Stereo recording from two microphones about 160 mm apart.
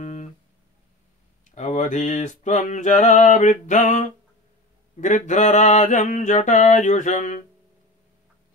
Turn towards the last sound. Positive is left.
turn(degrees=50)  # may be behind; listen again after turning